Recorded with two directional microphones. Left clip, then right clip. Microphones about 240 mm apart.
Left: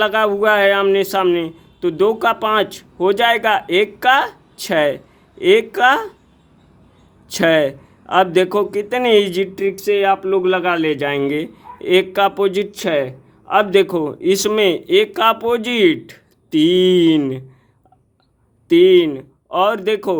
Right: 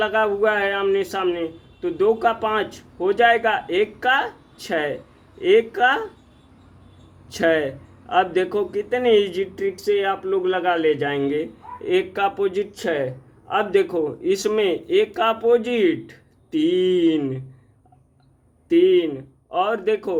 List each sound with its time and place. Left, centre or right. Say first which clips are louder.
0.0 s a man's voice: left 4 dB; left
7.3 s a man's voice: left 5 dB; left
18.7 s a man's voice: left 6 dB; left